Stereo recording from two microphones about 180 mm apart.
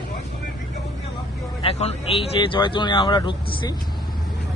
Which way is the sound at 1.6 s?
35° left (ahead or behind).